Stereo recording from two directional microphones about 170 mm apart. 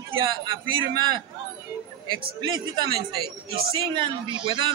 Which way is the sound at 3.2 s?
60° right (ahead or behind).